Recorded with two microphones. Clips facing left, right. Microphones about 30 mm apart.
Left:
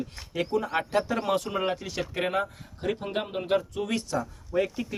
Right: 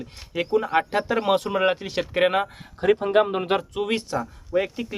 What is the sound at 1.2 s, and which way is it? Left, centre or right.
Speech, right.